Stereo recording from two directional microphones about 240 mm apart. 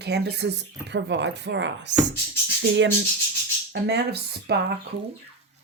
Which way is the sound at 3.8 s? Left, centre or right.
Right.